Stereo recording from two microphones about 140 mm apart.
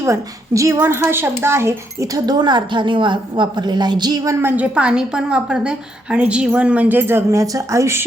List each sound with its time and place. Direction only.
0.0 s a woman's voice: 20° right (ahead or behind)